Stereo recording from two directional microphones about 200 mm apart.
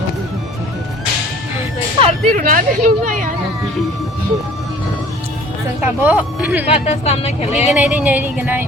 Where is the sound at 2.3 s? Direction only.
40° right (ahead or behind).